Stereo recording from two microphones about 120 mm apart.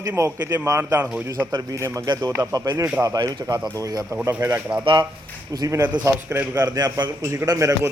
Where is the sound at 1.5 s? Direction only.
30° right (ahead or behind).